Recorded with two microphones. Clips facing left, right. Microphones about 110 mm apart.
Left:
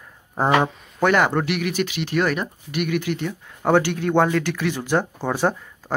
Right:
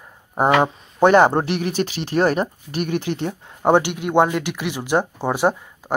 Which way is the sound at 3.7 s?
15° right (ahead or behind).